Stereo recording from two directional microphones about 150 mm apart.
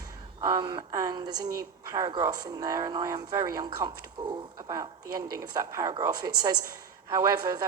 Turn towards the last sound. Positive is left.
turn(degrees=-25)  # may be behind; listen again after turning